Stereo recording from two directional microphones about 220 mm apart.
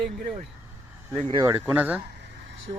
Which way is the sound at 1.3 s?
20° right (ahead or behind).